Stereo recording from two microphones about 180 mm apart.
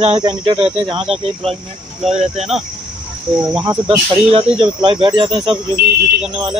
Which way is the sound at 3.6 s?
25° right (ahead or behind).